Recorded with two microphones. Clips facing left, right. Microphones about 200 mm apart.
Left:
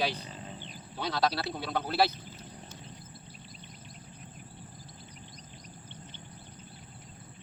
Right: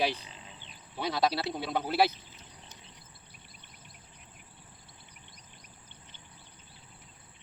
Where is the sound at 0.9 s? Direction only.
10° right (ahead or behind).